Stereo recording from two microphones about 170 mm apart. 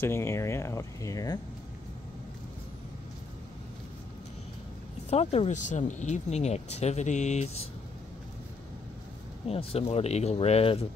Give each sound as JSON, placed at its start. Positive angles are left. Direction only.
{"t": 0.0, "sound": "speech", "side_deg": 15}
{"t": 5.1, "sound": "speech", "side_deg": 35}
{"t": 9.5, "sound": "speech", "side_deg": 35}